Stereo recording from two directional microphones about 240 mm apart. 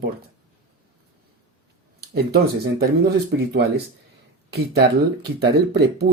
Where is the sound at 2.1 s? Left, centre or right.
Right.